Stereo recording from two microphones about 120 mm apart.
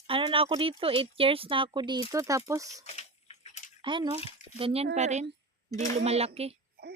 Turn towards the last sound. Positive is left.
turn(degrees=-60)  # may be behind; listen again after turning